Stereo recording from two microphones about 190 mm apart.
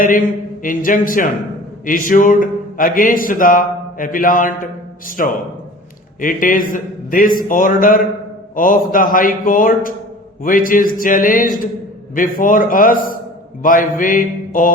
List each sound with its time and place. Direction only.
0.6 s speech: 45° left (ahead or behind)